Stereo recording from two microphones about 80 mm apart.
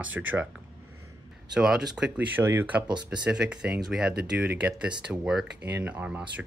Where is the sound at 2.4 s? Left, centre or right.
Right.